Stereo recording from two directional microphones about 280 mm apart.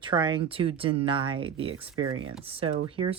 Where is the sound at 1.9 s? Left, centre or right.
Right.